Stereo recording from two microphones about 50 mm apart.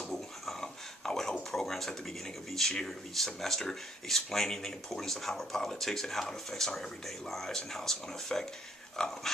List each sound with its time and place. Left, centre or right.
0.0 s dog: centre
1.5 s a sound: centre
2.7 s speech: centre